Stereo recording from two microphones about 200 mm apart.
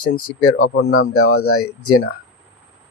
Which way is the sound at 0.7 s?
80° left.